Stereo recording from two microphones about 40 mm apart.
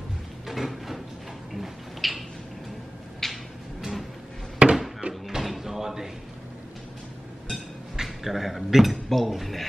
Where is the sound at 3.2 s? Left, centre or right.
Centre.